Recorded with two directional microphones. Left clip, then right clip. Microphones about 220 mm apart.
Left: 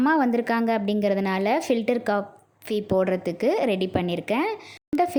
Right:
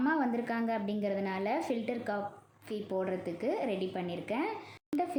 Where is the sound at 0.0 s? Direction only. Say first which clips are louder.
Left 10 dB; 45° left (ahead or behind).